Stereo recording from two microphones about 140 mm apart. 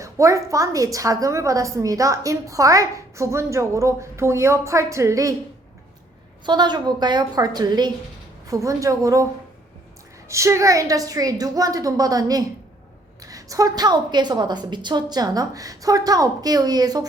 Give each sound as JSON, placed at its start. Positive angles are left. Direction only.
{"t": 0.0, "sound": "a woman's voice", "side_deg": -20}
{"t": 6.4, "sound": "a woman's voice", "side_deg": -30}
{"t": 10.2, "sound": "a woman's voice", "side_deg": -20}